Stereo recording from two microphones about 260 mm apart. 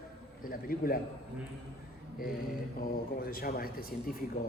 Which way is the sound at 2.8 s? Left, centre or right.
Left.